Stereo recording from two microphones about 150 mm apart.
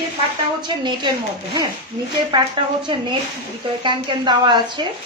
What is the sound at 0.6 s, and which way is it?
Speech, 30° right (ahead or behind).